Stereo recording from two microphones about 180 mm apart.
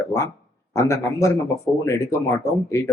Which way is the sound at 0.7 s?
15° left (ahead or behind).